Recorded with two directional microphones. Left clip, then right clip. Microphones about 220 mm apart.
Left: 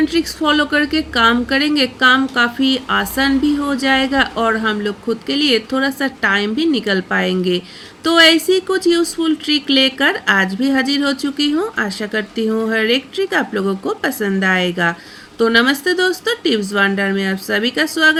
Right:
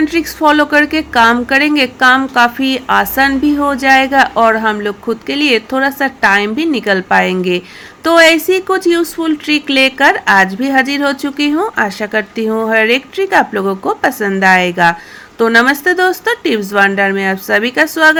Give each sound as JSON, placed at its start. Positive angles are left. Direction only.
{"t": 0.0, "sound": "a woman's voice", "side_deg": -15}